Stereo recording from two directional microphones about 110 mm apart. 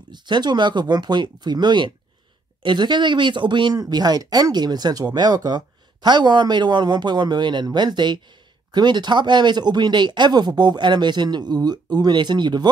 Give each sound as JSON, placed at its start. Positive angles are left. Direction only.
{"t": 0.1, "sound": "speech", "side_deg": -40}